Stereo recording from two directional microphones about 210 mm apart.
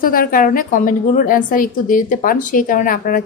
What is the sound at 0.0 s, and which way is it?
A woman's voice, 40° left (ahead or behind).